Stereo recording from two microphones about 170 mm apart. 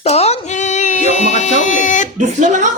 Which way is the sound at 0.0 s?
40° left (ahead or behind).